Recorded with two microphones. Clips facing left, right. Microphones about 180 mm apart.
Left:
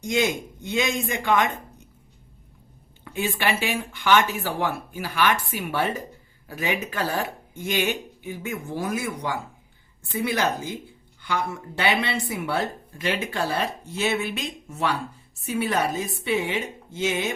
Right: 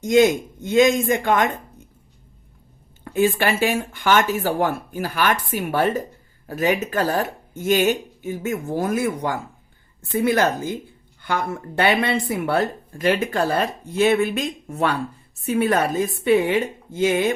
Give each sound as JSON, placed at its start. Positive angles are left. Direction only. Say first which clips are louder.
{"t": 0.0, "sound": "speech", "louder": "right 8 dB", "side_deg": -45}
{"t": 3.0, "sound": "speech", "louder": "right 7 dB", "side_deg": -45}